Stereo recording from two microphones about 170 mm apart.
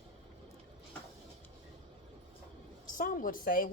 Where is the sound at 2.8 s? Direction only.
55° left (ahead or behind).